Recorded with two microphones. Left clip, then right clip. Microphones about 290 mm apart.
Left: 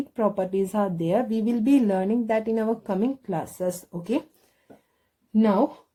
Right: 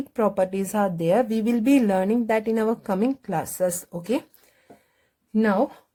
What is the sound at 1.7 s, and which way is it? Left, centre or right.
Speech, right.